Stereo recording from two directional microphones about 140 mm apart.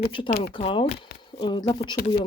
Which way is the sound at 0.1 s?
40° left (ahead or behind).